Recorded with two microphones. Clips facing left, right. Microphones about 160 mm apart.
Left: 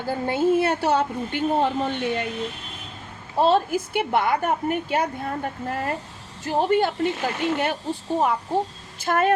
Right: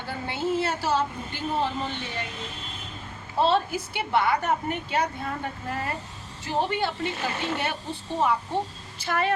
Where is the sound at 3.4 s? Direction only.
45° left (ahead or behind).